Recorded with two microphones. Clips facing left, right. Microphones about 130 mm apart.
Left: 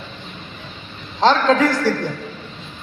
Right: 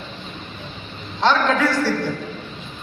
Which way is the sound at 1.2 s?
30° left (ahead or behind).